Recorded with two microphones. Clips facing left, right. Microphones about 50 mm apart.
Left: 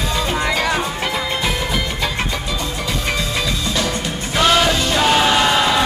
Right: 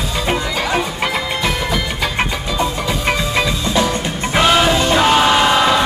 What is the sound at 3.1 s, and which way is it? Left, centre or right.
Music, centre.